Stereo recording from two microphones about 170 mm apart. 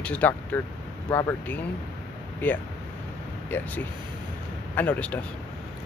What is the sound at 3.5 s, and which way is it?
Speech, 10° left (ahead or behind).